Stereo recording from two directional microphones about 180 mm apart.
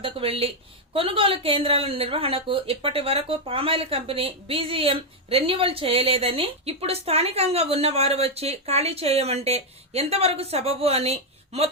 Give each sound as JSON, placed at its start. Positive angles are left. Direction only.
{"t": 0.0, "sound": "a woman's voice", "side_deg": -30}